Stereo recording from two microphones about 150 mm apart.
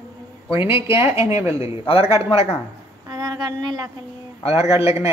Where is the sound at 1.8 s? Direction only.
40° left (ahead or behind).